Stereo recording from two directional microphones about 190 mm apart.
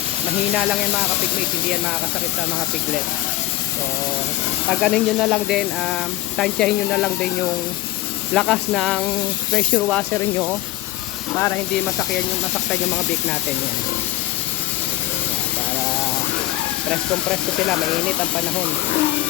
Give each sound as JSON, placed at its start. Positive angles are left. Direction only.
{"t": 0.5, "sound": "speech", "side_deg": -5}
{"t": 4.7, "sound": "speech", "side_deg": 0}
{"t": 8.3, "sound": "speech", "side_deg": 0}
{"t": 11.3, "sound": "speech", "side_deg": 10}
{"t": 16.9, "sound": "speech", "side_deg": 5}